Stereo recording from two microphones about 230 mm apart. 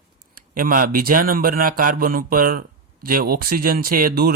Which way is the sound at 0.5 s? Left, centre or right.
Right.